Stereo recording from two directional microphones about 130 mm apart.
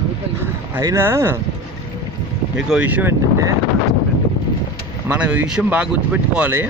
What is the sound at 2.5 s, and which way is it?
Speech, 10° right (ahead or behind).